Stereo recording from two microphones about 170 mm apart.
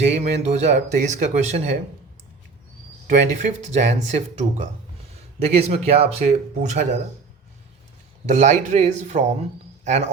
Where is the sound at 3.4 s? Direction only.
45° right (ahead or behind).